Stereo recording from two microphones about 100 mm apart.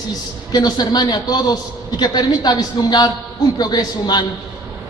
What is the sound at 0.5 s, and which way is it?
A man's voice, 45° left (ahead or behind).